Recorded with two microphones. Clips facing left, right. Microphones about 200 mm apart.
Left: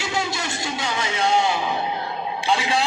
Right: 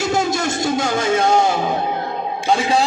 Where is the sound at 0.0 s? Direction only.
45° right (ahead or behind).